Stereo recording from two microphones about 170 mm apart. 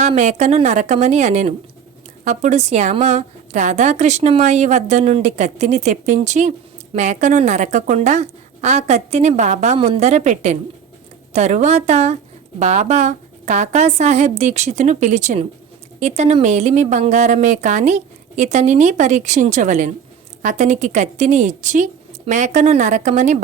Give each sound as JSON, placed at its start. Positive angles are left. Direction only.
{"t": 0.1, "sound": "a woman's voice", "side_deg": -40}